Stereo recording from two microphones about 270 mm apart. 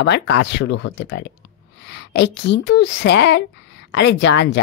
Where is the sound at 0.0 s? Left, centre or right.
Left.